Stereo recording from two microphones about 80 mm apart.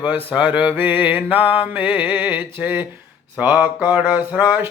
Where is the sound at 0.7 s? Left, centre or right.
Right.